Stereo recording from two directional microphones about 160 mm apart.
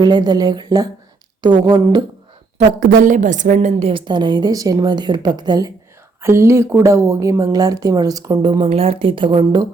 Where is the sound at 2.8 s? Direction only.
65° right (ahead or behind).